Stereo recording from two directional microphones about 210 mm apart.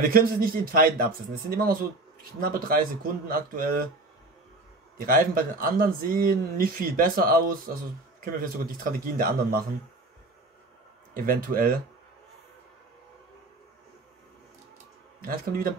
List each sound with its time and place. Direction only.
0.0 s speech: 45° right (ahead or behind)
5.0 s speech: 40° right (ahead or behind)
11.2 s speech: 40° right (ahead or behind)
15.2 s speech: 45° right (ahead or behind)